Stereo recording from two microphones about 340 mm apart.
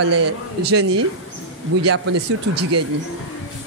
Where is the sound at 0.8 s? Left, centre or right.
Right.